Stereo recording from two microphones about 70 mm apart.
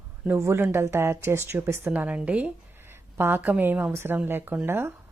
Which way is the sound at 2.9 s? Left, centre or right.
Right.